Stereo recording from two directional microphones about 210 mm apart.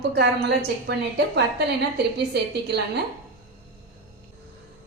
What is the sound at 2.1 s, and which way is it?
Speech, 50° right (ahead or behind).